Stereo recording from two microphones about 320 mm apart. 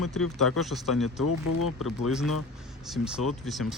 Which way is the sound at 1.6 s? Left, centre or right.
Left.